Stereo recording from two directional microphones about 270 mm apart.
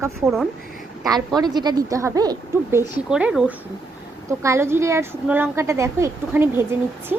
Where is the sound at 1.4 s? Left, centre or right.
Centre.